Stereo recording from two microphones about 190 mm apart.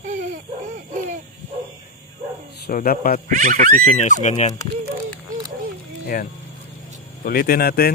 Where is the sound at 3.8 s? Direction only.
40° left (ahead or behind).